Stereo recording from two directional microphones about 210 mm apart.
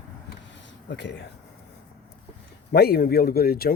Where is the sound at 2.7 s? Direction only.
50° left (ahead or behind).